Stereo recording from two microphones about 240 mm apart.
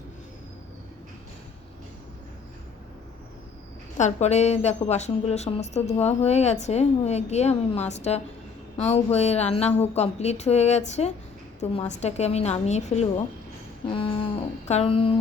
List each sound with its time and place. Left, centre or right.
3.9 s a woman's voice: left